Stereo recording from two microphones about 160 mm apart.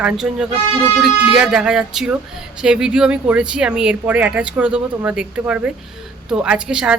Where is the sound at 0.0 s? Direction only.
5° right (ahead or behind).